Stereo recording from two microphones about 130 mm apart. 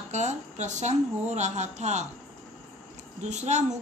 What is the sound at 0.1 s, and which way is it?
A woman's voice, 65° right (ahead or behind).